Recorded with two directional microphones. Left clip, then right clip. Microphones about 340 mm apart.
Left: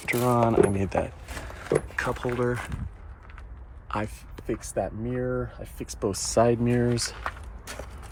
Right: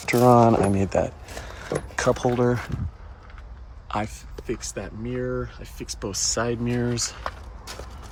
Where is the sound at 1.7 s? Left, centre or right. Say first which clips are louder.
Left 4 dB; left.